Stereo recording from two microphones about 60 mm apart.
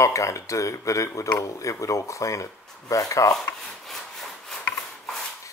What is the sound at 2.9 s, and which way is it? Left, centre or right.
Rub, left.